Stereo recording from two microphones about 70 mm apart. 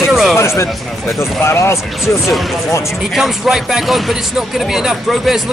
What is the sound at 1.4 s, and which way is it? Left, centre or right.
Speech, left.